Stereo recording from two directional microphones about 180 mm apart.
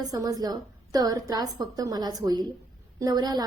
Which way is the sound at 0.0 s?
20° right (ahead or behind).